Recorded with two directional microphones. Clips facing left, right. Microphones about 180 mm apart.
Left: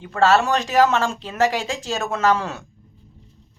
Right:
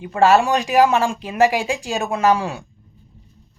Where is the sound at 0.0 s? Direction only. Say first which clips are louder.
Right 3 dB; 15° right (ahead or behind).